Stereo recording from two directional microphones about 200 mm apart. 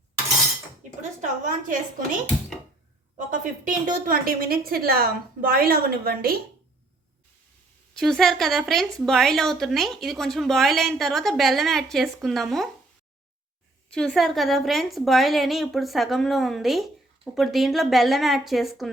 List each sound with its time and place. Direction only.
1.2 s a woman's voice: 40° right (ahead or behind)
3.2 s a woman's voice: 40° right (ahead or behind)
7.9 s speech: centre (ahead or behind)
13.9 s speech: centre (ahead or behind)